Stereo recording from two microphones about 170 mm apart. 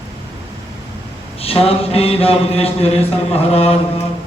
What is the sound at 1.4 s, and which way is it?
A man's voice, 35° left (ahead or behind).